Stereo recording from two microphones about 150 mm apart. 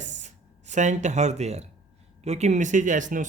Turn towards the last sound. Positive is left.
turn(degrees=-60)  # may be behind; listen again after turning